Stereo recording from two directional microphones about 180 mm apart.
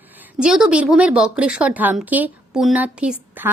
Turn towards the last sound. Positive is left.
turn(degrees=-10)  # may be behind; listen again after turning